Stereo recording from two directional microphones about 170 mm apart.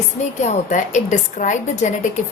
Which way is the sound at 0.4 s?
45° left (ahead or behind).